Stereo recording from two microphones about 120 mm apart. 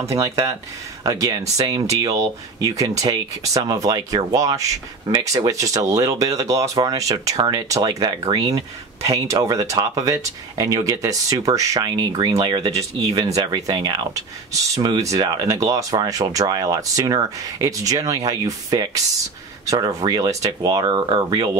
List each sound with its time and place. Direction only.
0.0 s speech: 25° right (ahead or behind)